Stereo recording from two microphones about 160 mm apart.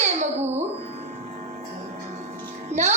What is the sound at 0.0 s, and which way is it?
Music, 45° right (ahead or behind).